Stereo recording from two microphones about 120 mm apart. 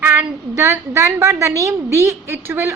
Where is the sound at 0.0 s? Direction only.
15° right (ahead or behind).